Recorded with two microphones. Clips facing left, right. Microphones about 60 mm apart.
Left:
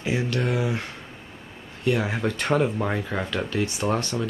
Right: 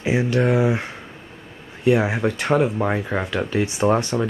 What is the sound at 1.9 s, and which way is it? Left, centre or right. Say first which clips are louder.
Speech: right 6 dB; centre.